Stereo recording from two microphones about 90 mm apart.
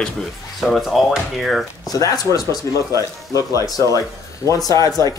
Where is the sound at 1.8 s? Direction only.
45° left (ahead or behind).